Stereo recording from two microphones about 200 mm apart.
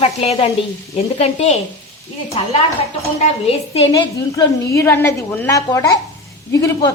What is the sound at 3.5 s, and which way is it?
Speech, 30° left (ahead or behind).